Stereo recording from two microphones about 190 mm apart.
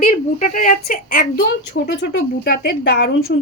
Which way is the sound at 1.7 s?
60° left (ahead or behind).